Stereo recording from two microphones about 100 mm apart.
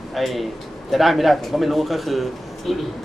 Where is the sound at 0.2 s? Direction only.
Centre (ahead or behind).